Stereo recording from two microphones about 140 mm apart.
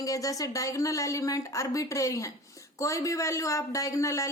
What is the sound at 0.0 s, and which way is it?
A woman's voice, 25° left (ahead or behind).